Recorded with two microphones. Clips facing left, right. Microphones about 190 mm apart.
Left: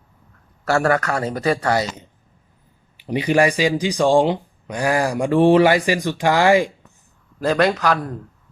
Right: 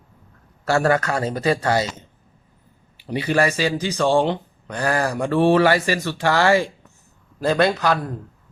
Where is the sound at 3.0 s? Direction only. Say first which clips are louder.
Left 3 dB; 15° left (ahead or behind).